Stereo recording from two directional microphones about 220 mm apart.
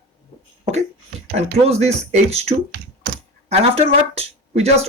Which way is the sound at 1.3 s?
30° right (ahead or behind).